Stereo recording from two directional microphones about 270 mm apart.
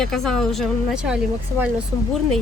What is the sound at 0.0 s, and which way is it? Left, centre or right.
Speech, centre.